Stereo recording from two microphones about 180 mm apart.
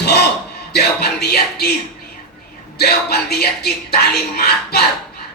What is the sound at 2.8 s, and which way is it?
Speech, 60° left (ahead or behind).